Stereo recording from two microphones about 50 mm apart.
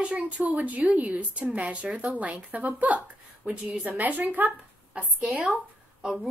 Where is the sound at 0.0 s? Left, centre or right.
Right.